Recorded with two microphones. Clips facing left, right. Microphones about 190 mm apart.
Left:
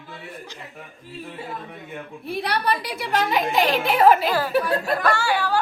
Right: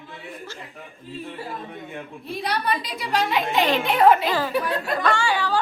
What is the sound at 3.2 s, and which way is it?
A woman's voice, centre (ahead or behind).